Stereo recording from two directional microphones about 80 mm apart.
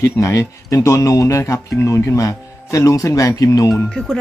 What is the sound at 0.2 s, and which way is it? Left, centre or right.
Speech, left.